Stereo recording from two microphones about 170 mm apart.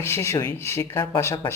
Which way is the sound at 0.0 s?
15° left (ahead or behind).